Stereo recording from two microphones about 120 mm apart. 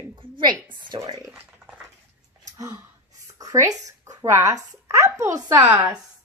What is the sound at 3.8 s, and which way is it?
Speech, 30° right (ahead or behind).